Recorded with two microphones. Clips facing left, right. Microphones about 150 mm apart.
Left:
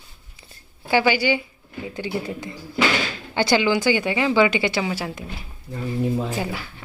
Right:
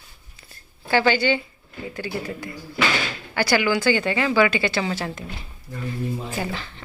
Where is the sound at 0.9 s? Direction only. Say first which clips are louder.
Even; 15° left (ahead or behind).